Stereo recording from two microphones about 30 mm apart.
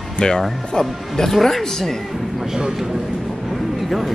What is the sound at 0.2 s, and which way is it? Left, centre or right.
Speech, left.